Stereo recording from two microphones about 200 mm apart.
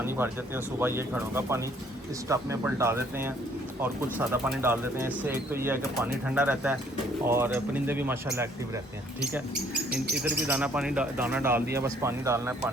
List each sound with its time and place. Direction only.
0.0 s speech: 10° right (ahead or behind)
4.3 s speech: 10° right (ahead or behind)
10.2 s speech: 5° right (ahead or behind)